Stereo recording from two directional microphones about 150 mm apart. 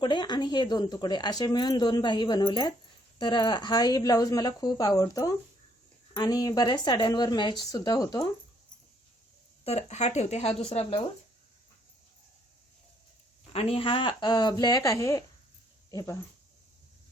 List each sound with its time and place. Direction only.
0.0 s speech: 30° left (ahead or behind)
9.6 s speech: 45° left (ahead or behind)
13.5 s speech: 40° left (ahead or behind); by 16.1 s 25° left (ahead or behind)